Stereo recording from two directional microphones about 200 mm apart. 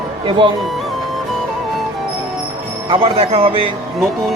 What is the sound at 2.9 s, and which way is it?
Speech, 30° right (ahead or behind).